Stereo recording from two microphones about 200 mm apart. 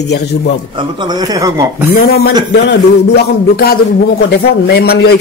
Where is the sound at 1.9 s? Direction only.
50° left (ahead or behind).